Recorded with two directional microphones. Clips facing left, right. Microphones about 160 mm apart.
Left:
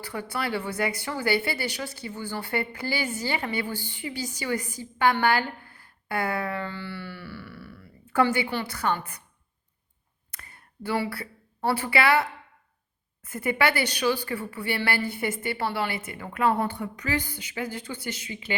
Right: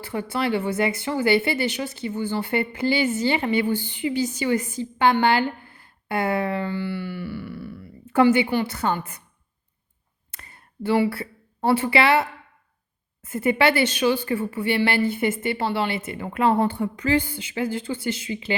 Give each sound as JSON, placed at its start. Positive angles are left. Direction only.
{"t": 0.0, "sound": "speech", "side_deg": -20}
{"t": 10.3, "sound": "a sound", "side_deg": -25}
{"t": 13.2, "sound": "speech", "side_deg": -25}